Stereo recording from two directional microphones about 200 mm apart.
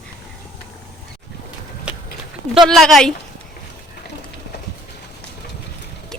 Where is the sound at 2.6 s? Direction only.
Centre (ahead or behind).